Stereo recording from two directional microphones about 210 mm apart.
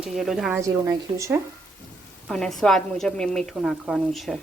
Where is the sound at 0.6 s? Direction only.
15° right (ahead or behind).